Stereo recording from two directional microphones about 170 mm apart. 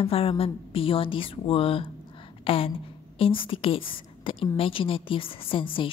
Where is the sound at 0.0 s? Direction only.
35° left (ahead or behind).